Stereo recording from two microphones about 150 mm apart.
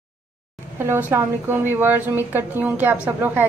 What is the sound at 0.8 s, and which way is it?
A woman's voice, 15° right (ahead or behind).